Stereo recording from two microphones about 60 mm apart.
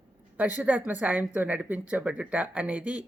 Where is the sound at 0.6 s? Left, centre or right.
Right.